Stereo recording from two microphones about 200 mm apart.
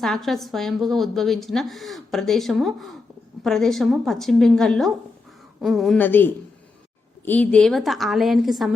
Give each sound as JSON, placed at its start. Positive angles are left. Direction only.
{"t": 0.0, "sound": "a woman's voice", "side_deg": 0}